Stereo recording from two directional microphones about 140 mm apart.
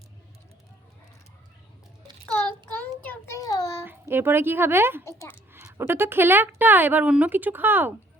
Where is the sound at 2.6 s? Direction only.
10° left (ahead or behind).